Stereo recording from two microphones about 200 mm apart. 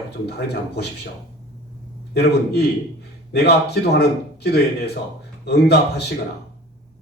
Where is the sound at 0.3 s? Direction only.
55° left (ahead or behind).